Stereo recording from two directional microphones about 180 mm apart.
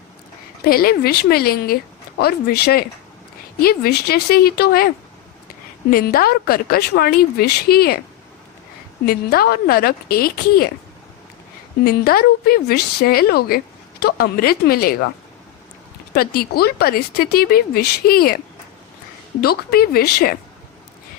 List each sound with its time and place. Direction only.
0.6 s speech: 55° left (ahead or behind)
5.9 s speech: 55° left (ahead or behind)
9.0 s speech: 60° left (ahead or behind)
11.9 s speech: 55° left (ahead or behind)
16.1 s speech: 55° left (ahead or behind)
19.4 s speech: 55° left (ahead or behind)